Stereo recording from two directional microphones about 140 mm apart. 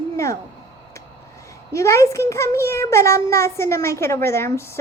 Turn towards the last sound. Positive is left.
turn(degrees=20)  # may be behind; listen again after turning